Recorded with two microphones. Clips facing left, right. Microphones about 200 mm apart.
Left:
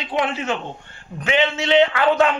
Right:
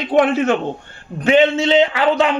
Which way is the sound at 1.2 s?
35° right (ahead or behind).